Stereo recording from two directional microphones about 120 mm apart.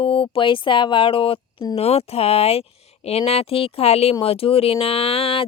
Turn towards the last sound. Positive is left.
turn(degrees=50)  # may be behind; listen again after turning